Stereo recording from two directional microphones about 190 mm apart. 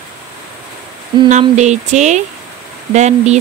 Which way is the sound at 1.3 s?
40° right (ahead or behind).